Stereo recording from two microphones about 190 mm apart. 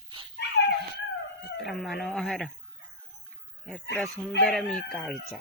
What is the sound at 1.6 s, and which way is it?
Speech, centre (ahead or behind).